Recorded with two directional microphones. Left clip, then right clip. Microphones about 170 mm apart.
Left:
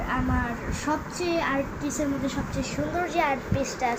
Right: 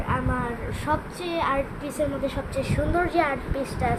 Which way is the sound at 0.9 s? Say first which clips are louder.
Even; 15° right (ahead or behind).